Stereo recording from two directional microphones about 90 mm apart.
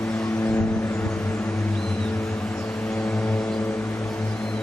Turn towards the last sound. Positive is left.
turn(degrees=10)  # may be behind; listen again after turning